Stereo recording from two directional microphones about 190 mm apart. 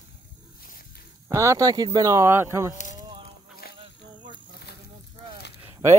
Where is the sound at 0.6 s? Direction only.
50° left (ahead or behind).